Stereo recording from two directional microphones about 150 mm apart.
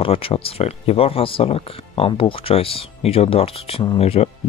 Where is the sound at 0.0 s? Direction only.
40° left (ahead or behind).